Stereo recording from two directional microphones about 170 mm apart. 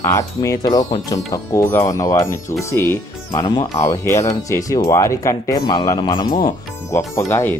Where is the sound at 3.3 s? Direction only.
25° left (ahead or behind).